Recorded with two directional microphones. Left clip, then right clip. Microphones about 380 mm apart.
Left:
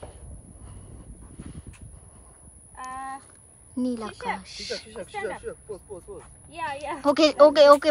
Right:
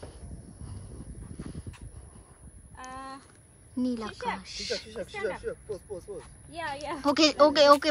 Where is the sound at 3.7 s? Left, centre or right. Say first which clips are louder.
Left 2 dB; centre.